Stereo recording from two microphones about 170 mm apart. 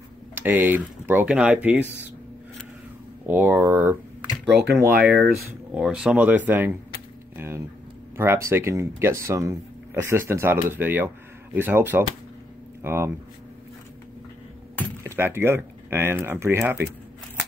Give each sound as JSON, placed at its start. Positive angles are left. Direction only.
{"t": 0.3, "sound": "speech", "side_deg": -10}
{"t": 3.3, "sound": "speech", "side_deg": -10}
{"t": 4.5, "sound": "speech", "side_deg": -80}
{"t": 5.8, "sound": "speech", "side_deg": -5}
{"t": 15.0, "sound": "speech", "side_deg": -15}